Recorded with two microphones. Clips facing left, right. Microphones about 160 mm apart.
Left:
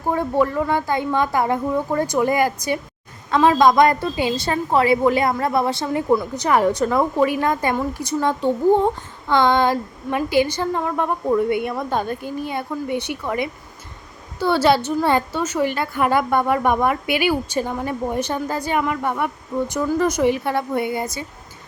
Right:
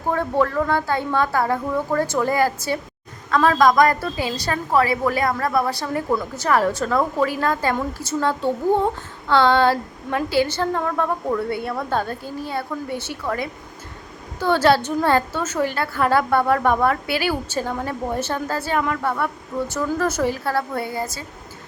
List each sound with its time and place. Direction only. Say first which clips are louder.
0.1 s a woman's voice: left 1 dB; 15° left (ahead or behind)